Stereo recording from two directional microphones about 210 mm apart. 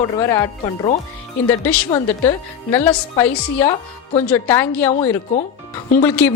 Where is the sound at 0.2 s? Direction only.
15° left (ahead or behind).